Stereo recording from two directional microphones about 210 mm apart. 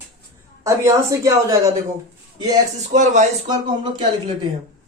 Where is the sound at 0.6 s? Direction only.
15° right (ahead or behind).